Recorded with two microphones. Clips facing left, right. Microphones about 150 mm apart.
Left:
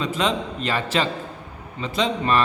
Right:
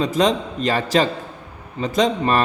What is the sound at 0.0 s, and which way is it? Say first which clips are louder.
A man's voice: right 5 dB; 40° right (ahead or behind).